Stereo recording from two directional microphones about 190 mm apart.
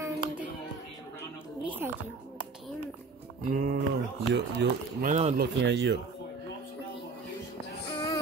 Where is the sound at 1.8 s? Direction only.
15° right (ahead or behind).